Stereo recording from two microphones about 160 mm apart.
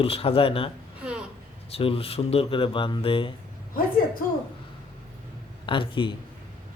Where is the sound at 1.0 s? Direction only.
5° right (ahead or behind).